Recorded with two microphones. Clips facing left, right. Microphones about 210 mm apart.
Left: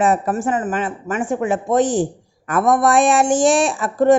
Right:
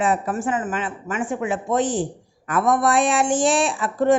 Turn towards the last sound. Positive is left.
turn(degrees=45)  # may be behind; listen again after turning